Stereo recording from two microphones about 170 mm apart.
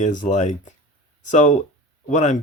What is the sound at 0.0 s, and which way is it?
Speech, 45° left (ahead or behind).